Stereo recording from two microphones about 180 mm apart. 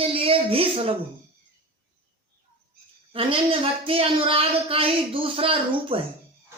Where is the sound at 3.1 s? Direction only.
30° right (ahead or behind).